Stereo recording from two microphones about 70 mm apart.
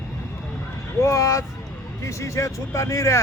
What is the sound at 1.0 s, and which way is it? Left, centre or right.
Speech, left.